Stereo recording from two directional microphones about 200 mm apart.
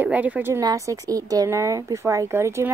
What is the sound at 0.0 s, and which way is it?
Speech, 10° right (ahead or behind).